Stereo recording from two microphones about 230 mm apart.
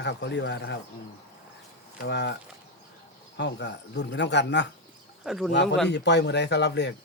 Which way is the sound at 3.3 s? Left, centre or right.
Left.